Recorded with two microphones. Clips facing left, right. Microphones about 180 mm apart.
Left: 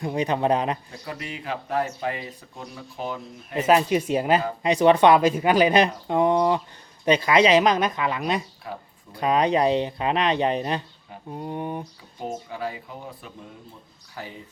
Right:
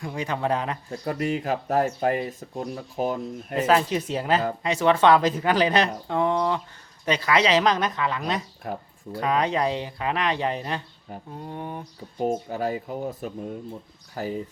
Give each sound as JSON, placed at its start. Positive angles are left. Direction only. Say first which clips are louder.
{"t": 0.0, "sound": "speech", "louder": "left 4 dB", "side_deg": 20}
{"t": 0.9, "sound": "speech", "louder": "right 9 dB", "side_deg": -45}
{"t": 3.7, "sound": "speech", "louder": "left 3 dB", "side_deg": 15}
{"t": 8.7, "sound": "speech", "louder": "right 3 dB", "side_deg": -50}
{"t": 9.2, "sound": "speech", "louder": "left 3 dB", "side_deg": 15}
{"t": 12.2, "sound": "speech", "louder": "right 5 dB", "side_deg": -45}